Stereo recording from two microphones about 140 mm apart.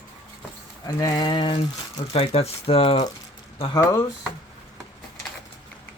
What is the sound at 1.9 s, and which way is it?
Speech, 45° left (ahead or behind).